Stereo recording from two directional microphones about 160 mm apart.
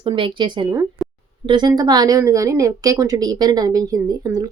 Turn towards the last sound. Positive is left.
turn(degrees=-25)  # may be behind; listen again after turning